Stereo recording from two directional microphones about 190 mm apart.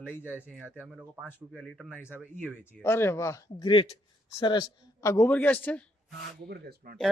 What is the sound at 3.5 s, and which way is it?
Speech, 25° left (ahead or behind).